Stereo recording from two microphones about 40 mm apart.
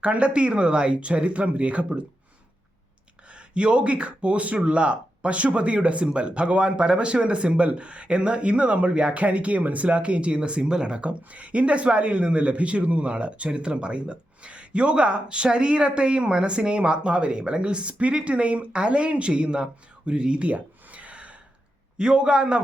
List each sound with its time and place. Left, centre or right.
0.0 s speech: right
3.3 s speech: right
20.5 s a sound: right
21.9 s speech: right